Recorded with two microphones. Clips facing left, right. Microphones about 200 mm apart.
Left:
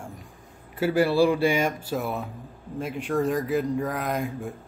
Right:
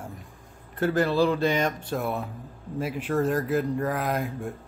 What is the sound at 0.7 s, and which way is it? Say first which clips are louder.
Speech: left 2 dB; 10° left (ahead or behind).